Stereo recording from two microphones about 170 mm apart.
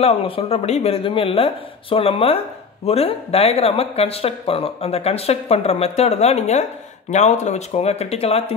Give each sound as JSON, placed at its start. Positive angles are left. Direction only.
{"t": 0.0, "sound": "speech", "side_deg": 35}